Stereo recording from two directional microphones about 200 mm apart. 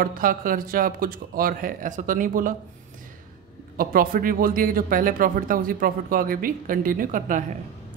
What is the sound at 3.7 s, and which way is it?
Speech, 45° right (ahead or behind).